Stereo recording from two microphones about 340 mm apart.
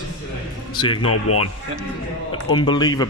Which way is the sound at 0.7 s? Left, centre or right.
Centre.